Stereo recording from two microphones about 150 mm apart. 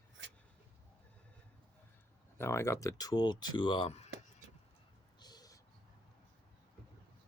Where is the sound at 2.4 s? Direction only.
20° left (ahead or behind); by 4.1 s 45° left (ahead or behind).